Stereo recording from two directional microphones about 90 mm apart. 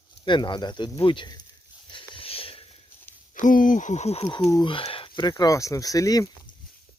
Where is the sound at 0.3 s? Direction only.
60° left (ahead or behind).